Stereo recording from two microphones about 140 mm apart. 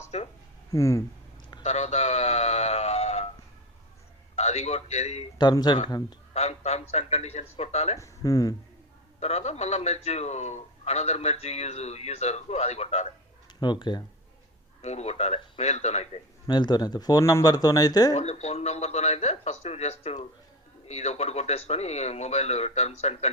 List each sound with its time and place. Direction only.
0.1 s a sound: 45° left (ahead or behind)
0.7 s speech: 20° left (ahead or behind)
1.6 s a sound: 50° left (ahead or behind)
4.4 s a man's voice: 50° left (ahead or behind)
5.4 s speech: 30° left (ahead or behind)
6.3 s a man's voice: 50° left (ahead or behind)
7.9 s speech: 25° left (ahead or behind)
9.2 s a man's voice: 50° left (ahead or behind)
13.6 s speech: 35° left (ahead or behind)
14.8 s a man's voice: 50° left (ahead or behind)
16.5 s speech: 30° left (ahead or behind)
18.1 s a man's voice: 50° left (ahead or behind)